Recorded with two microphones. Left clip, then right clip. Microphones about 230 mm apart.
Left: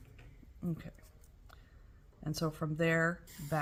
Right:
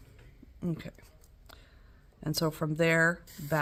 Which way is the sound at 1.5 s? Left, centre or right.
Right.